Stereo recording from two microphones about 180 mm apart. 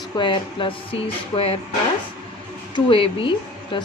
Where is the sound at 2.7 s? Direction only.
30° left (ahead or behind).